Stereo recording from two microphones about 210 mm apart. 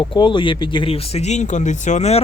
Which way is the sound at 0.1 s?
25° left (ahead or behind).